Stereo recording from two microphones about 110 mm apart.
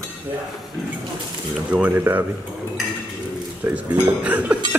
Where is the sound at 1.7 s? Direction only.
15° right (ahead or behind).